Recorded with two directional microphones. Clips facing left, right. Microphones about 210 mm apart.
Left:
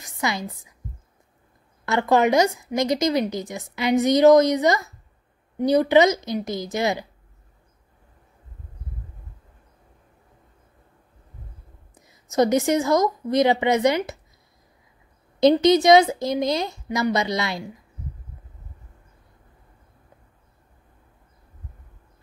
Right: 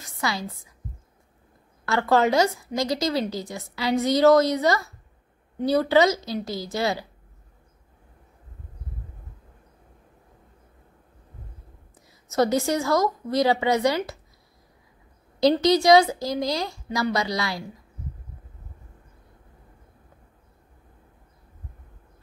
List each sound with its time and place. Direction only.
0.0 s a sound: 20° left (ahead or behind)
1.9 s a woman's voice: 15° left (ahead or behind)
12.1 s a woman's voice: 20° left (ahead or behind)
15.4 s a woman's voice: 20° left (ahead or behind)